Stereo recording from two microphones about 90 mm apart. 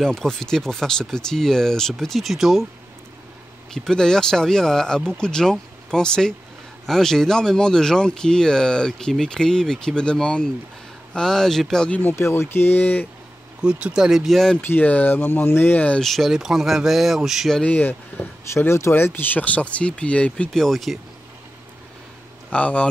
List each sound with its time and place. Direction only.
0.0 s speech: 5° left (ahead or behind)
3.7 s speech: 5° left (ahead or behind)
12.0 s speech: 25° left (ahead or behind)
13.6 s speech: 10° right (ahead or behind)
14.6 s speech: 20° left (ahead or behind)
16.0 s speech: centre (ahead or behind)
17.6 s speech: 20° left (ahead or behind); by 21.0 s centre (ahead or behind)
22.5 s speech: 15° left (ahead or behind)